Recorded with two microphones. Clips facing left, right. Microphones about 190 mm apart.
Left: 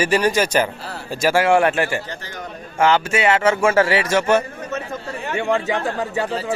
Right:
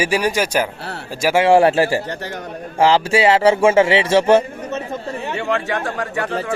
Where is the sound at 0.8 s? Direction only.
70° right (ahead or behind).